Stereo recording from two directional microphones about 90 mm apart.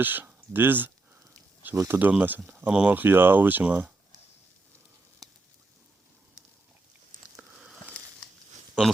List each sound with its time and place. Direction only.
0.0 s speech: 20° right (ahead or behind)
1.7 s speech: 35° right (ahead or behind)
2.0 s speech: 20° right (ahead or behind)
2.6 s speech: 10° right (ahead or behind)
2.9 s speech: 20° right (ahead or behind)
7.3 s a sound: 10° right (ahead or behind)